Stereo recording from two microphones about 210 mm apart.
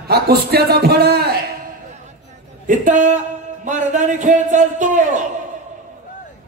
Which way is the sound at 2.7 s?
35° right (ahead or behind).